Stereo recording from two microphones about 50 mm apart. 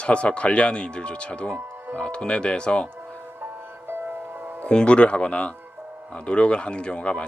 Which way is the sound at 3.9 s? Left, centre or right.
Right.